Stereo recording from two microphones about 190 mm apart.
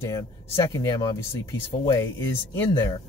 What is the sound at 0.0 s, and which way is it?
Speech, 15° left (ahead or behind).